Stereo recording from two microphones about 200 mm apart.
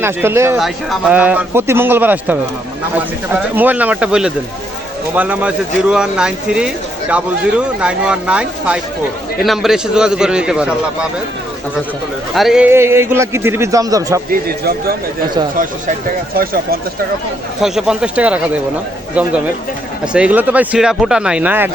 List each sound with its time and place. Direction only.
0.0 s a man's voice: 10° right (ahead or behind)
12.3 s a man's voice: centre (ahead or behind); by 14.2 s 15° right (ahead or behind)
14.3 s speech: 50° right (ahead or behind)
17.6 s speech: 5° right (ahead or behind)
20.1 s speech: 5° right (ahead or behind)